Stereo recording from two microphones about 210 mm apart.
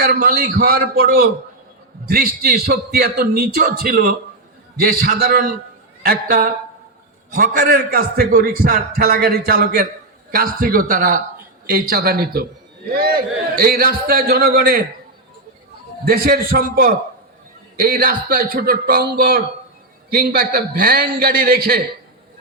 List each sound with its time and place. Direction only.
0.0 s a man's voice: 45° right (ahead or behind)
16.0 s a man's voice: 45° right (ahead or behind)